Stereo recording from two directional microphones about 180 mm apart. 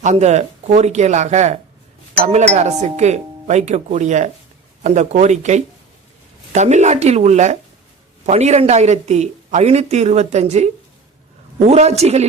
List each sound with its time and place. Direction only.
0.0 s speech: 40° right (ahead or behind)